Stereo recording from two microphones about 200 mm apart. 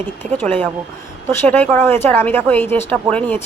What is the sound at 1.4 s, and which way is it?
Speech, 10° left (ahead or behind).